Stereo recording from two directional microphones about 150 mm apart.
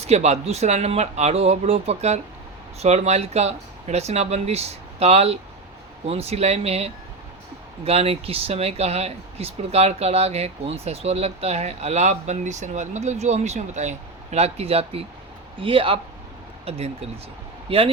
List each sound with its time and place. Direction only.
0.0 s speech: 45° right (ahead or behind)